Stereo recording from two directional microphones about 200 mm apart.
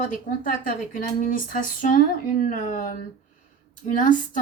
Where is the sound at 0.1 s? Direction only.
40° left (ahead or behind).